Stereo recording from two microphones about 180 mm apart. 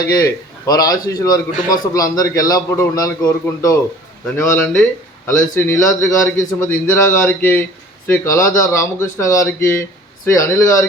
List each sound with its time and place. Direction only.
0.1 s a man's voice: 20° left (ahead or behind)
5.7 s a man's voice: 45° left (ahead or behind)
6.6 s speech: 10° left (ahead or behind)